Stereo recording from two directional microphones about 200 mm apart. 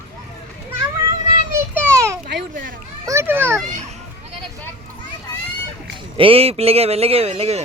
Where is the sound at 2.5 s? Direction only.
45° right (ahead or behind).